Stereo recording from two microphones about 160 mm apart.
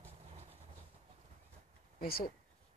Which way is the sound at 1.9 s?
70° left (ahead or behind).